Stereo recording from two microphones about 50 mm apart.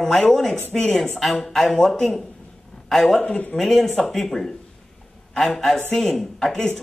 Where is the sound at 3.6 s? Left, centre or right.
Centre.